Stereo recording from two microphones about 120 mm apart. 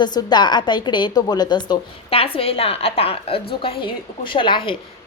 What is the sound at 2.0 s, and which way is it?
A woman's voice, 50° left (ahead or behind).